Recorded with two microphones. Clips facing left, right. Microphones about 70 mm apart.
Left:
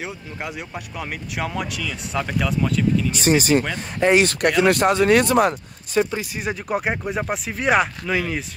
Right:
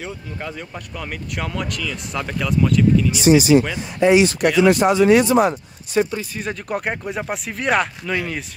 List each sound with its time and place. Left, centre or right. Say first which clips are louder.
0.0 s speech: right 1 dB; centre
3.1 s speech: right 5 dB; left
6.3 s speech: left 1 dB; centre